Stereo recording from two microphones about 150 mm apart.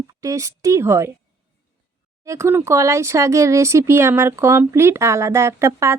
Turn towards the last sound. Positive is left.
turn(degrees=-20)  # may be behind; listen again after turning